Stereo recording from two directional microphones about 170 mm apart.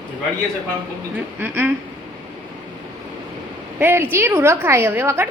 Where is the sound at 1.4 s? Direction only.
10° right (ahead or behind).